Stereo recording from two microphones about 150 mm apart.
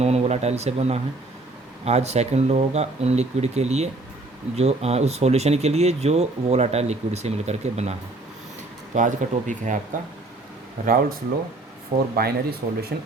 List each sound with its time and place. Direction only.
0.0 s speech: 45° right (ahead or behind)
9.0 s speech: 55° right (ahead or behind)
10.8 s speech: 70° right (ahead or behind)
12.1 s speech: 90° right